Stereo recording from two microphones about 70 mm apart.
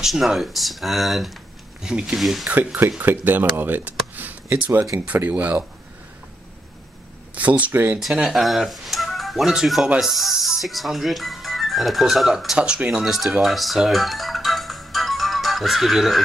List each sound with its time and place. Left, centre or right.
0.0 s speech: centre
1.8 s speech: centre
2.1 s speech: centre
2.4 s speech: right
7.3 s speech: right
8.1 s speech: centre
8.4 s speech: centre
12.5 s speech: centre
13.4 s music: centre